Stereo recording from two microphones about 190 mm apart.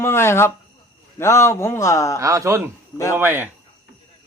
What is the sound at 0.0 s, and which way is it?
A man's voice, 15° left (ahead or behind).